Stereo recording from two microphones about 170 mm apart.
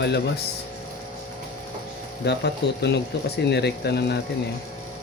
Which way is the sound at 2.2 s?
80° left.